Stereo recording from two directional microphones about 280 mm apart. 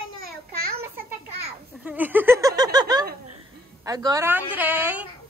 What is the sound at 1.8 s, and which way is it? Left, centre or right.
Speech, centre.